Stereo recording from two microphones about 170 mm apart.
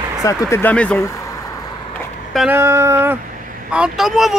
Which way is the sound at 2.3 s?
10° right (ahead or behind).